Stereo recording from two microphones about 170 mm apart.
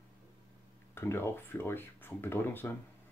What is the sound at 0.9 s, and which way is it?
Speech, 15° left (ahead or behind).